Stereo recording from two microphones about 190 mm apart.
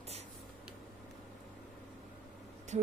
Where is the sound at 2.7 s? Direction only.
35° right (ahead or behind).